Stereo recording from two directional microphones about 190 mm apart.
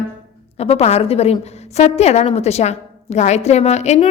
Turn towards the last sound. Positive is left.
turn(degrees=35)  # may be behind; listen again after turning